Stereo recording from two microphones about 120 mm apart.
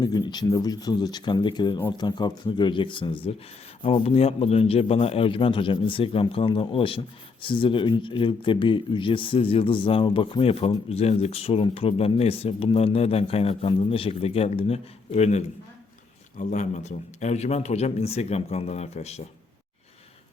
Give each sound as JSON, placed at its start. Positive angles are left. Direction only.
{"t": 0.0, "sound": "speech", "side_deg": 35}
{"t": 16.4, "sound": "speech", "side_deg": 80}